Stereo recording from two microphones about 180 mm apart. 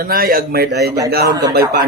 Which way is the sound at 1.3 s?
20° right (ahead or behind).